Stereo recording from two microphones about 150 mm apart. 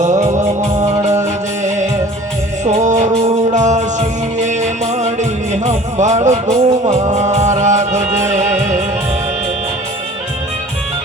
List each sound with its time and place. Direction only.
0.0 s music: 50° right (ahead or behind)